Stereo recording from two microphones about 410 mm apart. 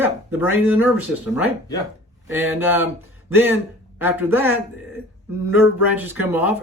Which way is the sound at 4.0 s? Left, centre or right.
Centre.